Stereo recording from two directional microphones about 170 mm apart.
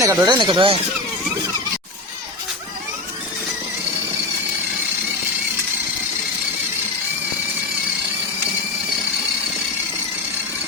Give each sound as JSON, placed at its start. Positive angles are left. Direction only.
{"t": 0.0, "sound": "speech", "side_deg": -20}